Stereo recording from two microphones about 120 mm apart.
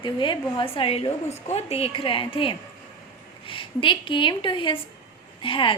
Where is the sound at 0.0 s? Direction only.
45° left (ahead or behind).